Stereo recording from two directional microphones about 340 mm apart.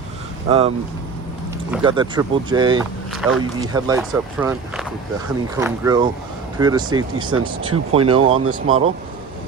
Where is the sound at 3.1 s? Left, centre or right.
Centre.